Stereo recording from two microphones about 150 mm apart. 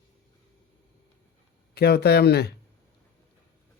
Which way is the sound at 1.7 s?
90° left.